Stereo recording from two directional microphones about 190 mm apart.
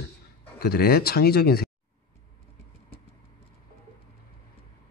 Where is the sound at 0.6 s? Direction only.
55° left (ahead or behind).